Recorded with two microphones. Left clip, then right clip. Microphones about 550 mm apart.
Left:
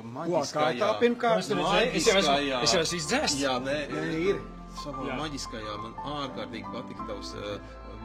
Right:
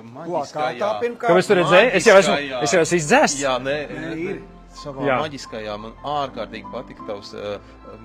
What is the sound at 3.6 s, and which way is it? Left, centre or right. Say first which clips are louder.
Speech: right 7 dB; right.